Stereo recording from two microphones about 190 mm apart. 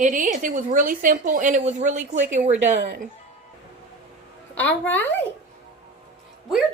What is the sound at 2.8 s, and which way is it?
Speech, 60° right (ahead or behind).